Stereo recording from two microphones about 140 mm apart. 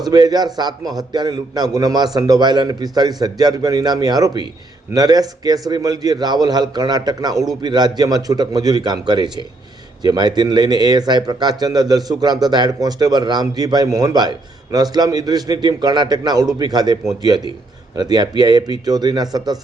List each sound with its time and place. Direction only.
0.1 s a man's voice: 30° right (ahead or behind)